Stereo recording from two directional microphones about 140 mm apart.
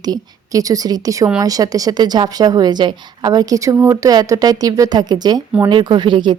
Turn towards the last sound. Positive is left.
turn(degrees=-35)  # may be behind; listen again after turning